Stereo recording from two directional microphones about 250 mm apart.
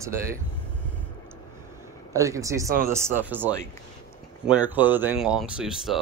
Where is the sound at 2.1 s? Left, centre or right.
Centre.